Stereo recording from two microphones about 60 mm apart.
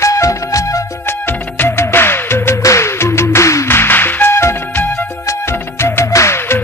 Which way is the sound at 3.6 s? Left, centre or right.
Left.